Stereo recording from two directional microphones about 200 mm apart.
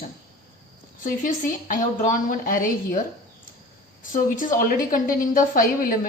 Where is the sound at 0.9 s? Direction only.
40° left (ahead or behind).